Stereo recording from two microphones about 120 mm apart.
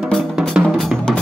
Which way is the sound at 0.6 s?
5° left (ahead or behind).